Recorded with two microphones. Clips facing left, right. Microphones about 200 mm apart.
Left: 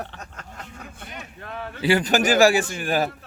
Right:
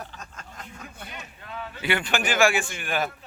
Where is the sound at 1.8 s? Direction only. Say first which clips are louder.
Left 7 dB; 35° left (ahead or behind).